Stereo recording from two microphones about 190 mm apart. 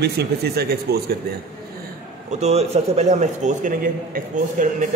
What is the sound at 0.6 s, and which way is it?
Speech, 55° right (ahead or behind).